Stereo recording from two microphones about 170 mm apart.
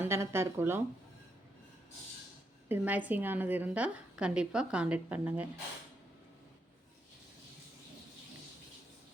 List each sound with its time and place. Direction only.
0.0 s a woman's voice: 15° right (ahead or behind)
2.6 s a woman's voice: 10° right (ahead or behind)